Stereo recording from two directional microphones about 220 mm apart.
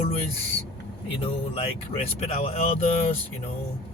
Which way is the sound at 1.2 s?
25° left (ahead or behind).